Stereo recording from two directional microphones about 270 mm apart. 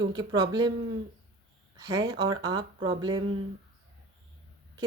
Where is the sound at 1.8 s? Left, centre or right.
Centre.